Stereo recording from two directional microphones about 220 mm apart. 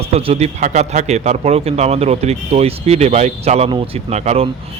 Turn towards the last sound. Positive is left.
turn(degrees=-30)  # may be behind; listen again after turning